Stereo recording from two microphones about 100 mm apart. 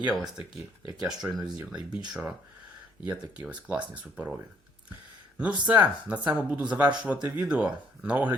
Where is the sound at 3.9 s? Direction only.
15° right (ahead or behind).